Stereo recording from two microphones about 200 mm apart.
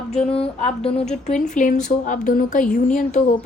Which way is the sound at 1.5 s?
40° left (ahead or behind).